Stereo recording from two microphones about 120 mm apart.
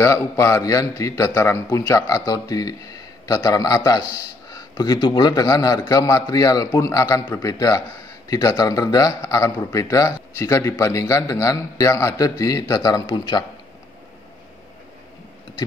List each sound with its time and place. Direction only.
0.0 s a man's voice: 25° left (ahead or behind)